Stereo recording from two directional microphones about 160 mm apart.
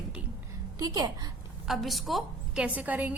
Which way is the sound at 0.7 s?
25° right (ahead or behind).